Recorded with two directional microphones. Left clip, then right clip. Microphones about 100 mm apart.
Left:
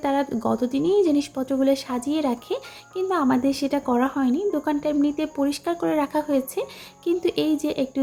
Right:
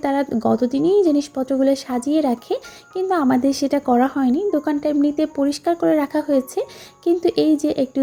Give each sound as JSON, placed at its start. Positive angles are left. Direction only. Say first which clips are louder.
{"t": 0.0, "sound": "speech", "louder": "right 3 dB", "side_deg": -40}